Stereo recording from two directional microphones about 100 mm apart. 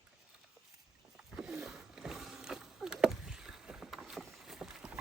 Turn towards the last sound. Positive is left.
turn(degrees=-5)  # may be behind; listen again after turning